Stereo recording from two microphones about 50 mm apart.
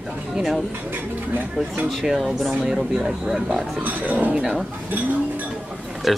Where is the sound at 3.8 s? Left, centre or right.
Right.